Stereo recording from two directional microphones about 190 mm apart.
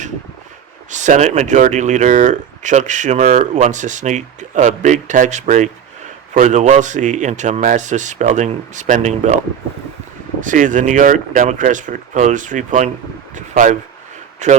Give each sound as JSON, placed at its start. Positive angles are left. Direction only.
{"t": 0.9, "sound": "speech", "side_deg": -40}
{"t": 10.4, "sound": "speech", "side_deg": -40}